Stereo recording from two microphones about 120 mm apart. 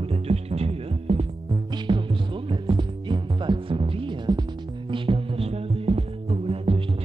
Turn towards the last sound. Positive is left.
turn(degrees=-50)  # may be behind; listen again after turning